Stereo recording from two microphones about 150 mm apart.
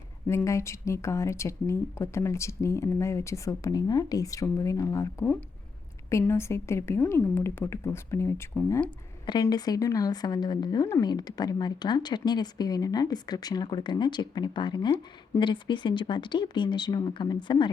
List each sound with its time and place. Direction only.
0.3 s a woman's voice: 20° left (ahead or behind)
6.1 s speech: 20° left (ahead or behind)
9.2 s a woman's voice: 30° left (ahead or behind)